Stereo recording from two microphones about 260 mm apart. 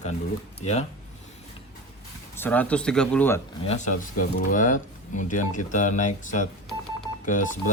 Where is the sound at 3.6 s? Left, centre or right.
Left.